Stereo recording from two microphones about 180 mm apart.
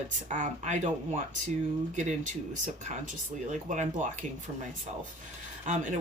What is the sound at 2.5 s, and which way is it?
Speech, 45° right (ahead or behind).